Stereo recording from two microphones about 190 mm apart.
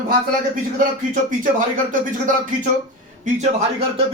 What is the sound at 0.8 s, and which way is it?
Speech, 45° right (ahead or behind).